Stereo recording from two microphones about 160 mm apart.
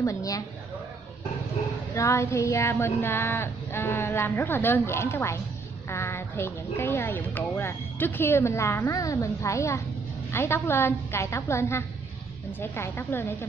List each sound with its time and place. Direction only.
0.0 s a woman's voice: 20° left (ahead or behind)
2.0 s speech: 15° left (ahead or behind)